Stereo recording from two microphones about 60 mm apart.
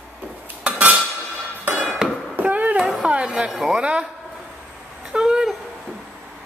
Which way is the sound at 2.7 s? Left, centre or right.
Centre.